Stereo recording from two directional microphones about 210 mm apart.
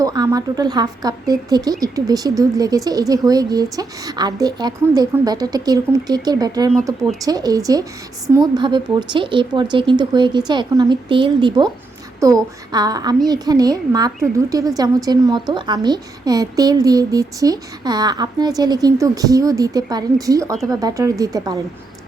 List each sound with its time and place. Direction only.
0.0 s a woman's voice: 15° right (ahead or behind)